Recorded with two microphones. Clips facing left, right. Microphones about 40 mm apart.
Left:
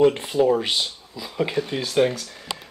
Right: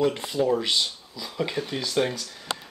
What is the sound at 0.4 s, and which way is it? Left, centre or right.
Speech, left.